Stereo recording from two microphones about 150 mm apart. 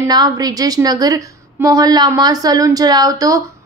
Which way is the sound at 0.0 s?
25° right (ahead or behind).